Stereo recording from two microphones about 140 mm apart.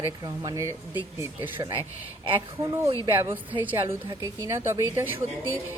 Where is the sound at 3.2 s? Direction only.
10° right (ahead or behind).